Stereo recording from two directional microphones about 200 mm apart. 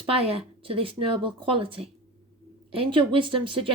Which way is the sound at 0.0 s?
30° right (ahead or behind).